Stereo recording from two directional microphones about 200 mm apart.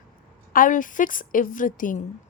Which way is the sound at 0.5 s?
40° left (ahead or behind).